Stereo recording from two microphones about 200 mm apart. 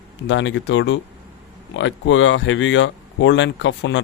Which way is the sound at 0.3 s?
65° left (ahead or behind).